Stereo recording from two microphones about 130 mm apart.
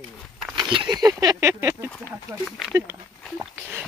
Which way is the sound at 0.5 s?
35° right (ahead or behind).